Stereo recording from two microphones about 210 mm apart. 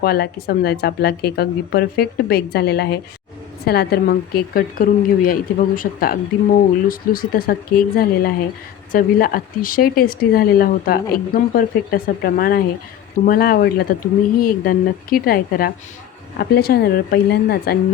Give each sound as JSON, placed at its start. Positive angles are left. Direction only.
{"t": 0.0, "sound": "speech", "side_deg": 45}